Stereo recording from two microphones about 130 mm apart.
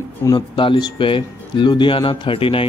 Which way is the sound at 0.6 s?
35° left (ahead or behind).